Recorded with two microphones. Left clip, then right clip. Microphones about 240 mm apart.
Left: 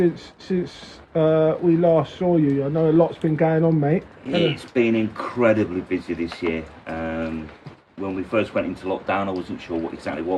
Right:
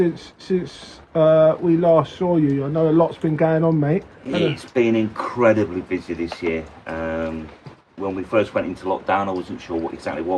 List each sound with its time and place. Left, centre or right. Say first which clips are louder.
0.0 s speech: even; right
4.4 s speech: right 1 dB; centre